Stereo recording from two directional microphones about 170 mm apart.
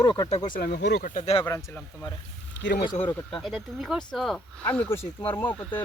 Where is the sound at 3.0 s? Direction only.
25° left (ahead or behind).